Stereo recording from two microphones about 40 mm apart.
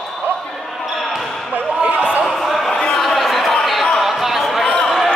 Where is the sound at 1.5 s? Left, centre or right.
Right.